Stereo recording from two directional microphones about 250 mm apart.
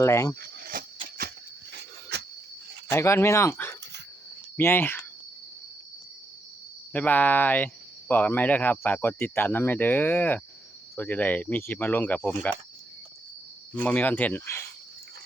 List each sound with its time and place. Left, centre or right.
0.0 s speech: centre
0.3 s a sound: right
1.7 s dog: right
2.9 s speech: centre
6.9 s speech: centre
13.7 s speech: centre